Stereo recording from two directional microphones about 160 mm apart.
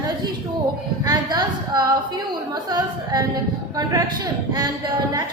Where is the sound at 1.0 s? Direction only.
25° right (ahead or behind).